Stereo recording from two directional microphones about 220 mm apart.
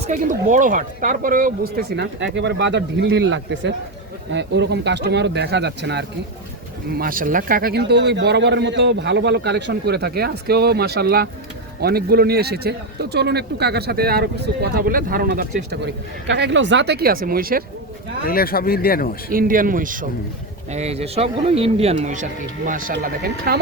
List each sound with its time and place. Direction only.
0.0 s a man's voice: 35° right (ahead or behind)
16.3 s a man's voice: 55° right (ahead or behind)
18.3 s speech: 40° left (ahead or behind)
19.3 s speech: 40° right (ahead or behind)